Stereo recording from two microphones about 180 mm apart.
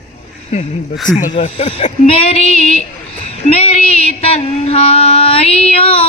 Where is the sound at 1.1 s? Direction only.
35° left (ahead or behind).